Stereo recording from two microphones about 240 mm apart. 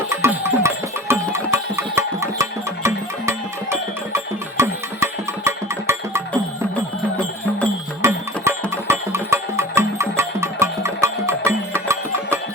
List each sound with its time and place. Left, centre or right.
0.1 s music: centre
8.0 s music: centre